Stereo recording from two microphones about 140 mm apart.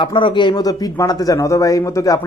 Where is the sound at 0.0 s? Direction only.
35° left (ahead or behind).